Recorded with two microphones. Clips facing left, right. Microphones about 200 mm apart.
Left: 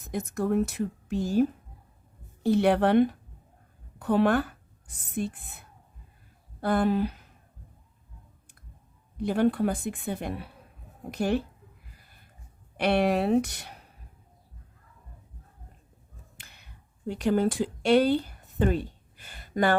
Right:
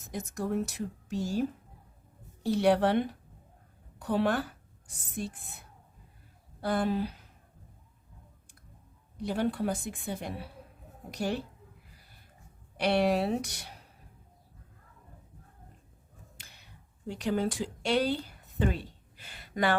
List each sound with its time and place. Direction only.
0.1 s a woman's voice: 60° left (ahead or behind)
9.2 s a woman's voice: 55° left (ahead or behind)
12.8 s a woman's voice: 60° left (ahead or behind)
17.1 s speech: 55° left (ahead or behind)